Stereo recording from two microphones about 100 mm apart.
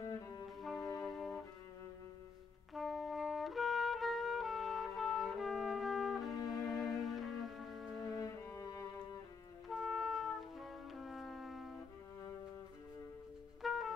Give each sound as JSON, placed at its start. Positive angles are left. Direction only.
{"t": 0.6, "sound": "music", "side_deg": 0}
{"t": 2.7, "sound": "trumpet", "side_deg": 0}
{"t": 8.2, "sound": "cello", "side_deg": 30}
{"t": 9.7, "sound": "music", "side_deg": 0}
{"t": 13.6, "sound": "music", "side_deg": 0}